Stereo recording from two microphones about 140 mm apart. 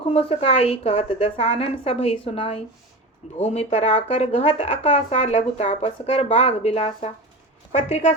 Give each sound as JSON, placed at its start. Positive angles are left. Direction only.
{"t": 0.1, "sound": "a woman's voice", "side_deg": 45}